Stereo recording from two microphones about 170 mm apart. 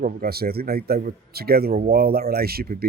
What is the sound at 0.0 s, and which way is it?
A man's voice, 60° right (ahead or behind).